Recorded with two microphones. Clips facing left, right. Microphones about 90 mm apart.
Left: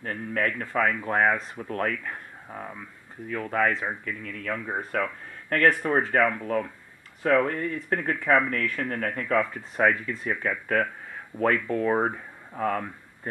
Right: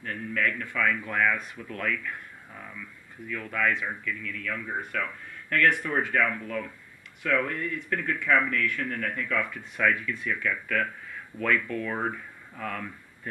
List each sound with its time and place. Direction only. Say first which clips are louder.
0.0 s speech: left 1 dB; 40° left (ahead or behind)